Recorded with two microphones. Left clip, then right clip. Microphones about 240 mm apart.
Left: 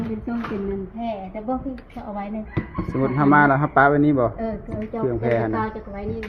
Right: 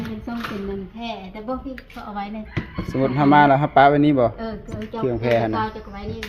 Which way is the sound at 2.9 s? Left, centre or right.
Right.